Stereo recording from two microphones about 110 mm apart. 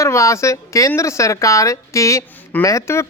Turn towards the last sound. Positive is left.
turn(degrees=25)  # may be behind; listen again after turning